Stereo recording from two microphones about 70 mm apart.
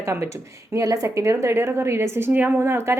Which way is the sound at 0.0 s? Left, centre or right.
Right.